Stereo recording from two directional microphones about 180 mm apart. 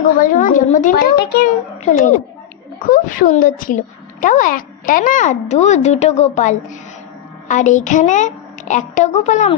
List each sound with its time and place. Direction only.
0.2 s a woman's voice: 50° left (ahead or behind)